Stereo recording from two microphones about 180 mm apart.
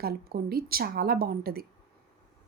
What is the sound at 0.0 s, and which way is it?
Speech, 60° right (ahead or behind).